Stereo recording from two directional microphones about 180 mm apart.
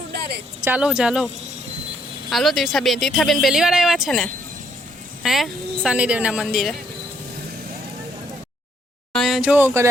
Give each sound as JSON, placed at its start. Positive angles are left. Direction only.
{"t": 0.1, "sound": "a sound", "side_deg": -60}
{"t": 0.6, "sound": "speech", "side_deg": -5}
{"t": 2.3, "sound": "speech", "side_deg": 0}
{"t": 9.1, "sound": "speech", "side_deg": 0}